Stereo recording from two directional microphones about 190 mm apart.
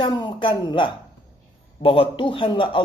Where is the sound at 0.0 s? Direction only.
25° left (ahead or behind).